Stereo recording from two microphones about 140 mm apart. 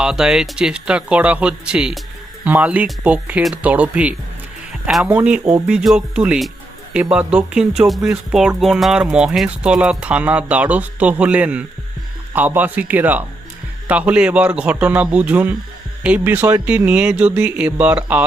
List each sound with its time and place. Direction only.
0.0 s speech: 5° right (ahead or behind)